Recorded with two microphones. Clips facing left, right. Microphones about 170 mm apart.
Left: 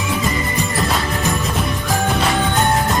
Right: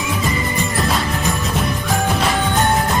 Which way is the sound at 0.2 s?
Centre (ahead or behind).